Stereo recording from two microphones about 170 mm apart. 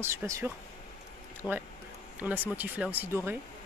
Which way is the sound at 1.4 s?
15° left (ahead or behind).